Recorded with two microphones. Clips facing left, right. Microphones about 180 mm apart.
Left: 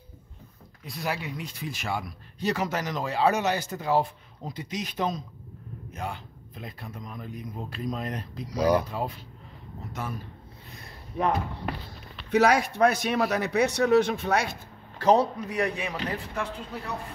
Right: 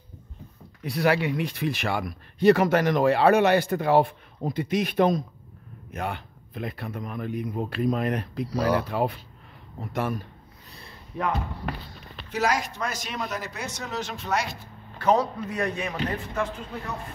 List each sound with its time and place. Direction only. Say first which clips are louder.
0.8 s speech: right 9 dB; 70° right (ahead or behind)
8.5 s speech: left 2 dB; 15° left (ahead or behind)
8.8 s speech: right 6 dB; 65° right (ahead or behind)
9.9 s speech: right 7 dB; 55° right (ahead or behind)
12.3 s speech: left 5 dB; 60° left (ahead or behind)
15.0 s a man's voice: left 1 dB; 35° left (ahead or behind)
15.3 s speech: even; 15° left (ahead or behind)